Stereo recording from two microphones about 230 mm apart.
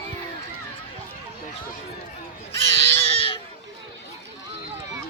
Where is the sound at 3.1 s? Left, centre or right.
Left.